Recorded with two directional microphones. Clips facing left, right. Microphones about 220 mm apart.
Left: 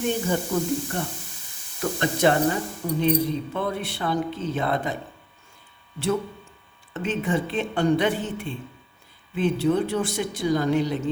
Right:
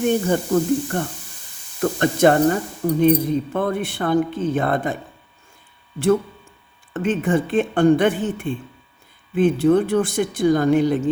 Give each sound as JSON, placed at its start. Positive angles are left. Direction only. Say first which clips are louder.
{"t": 0.3, "sound": "speech", "louder": "right 6 dB", "side_deg": -50}
{"t": 6.9, "sound": "speech", "louder": "right 5 dB", "side_deg": -50}